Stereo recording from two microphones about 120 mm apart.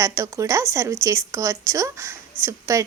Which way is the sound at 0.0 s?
25° right (ahead or behind).